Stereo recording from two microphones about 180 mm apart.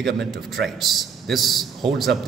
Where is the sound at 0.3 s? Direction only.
Centre (ahead or behind).